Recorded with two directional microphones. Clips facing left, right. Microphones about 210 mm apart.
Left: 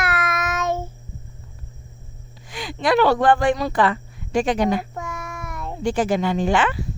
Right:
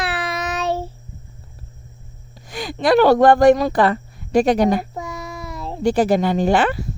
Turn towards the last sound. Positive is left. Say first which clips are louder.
# right 3 dB
turn(degrees=-40)  # may be behind; listen again after turning